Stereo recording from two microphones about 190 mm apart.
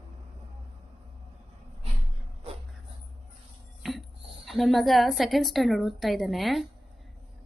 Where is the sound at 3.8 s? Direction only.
Centre (ahead or behind).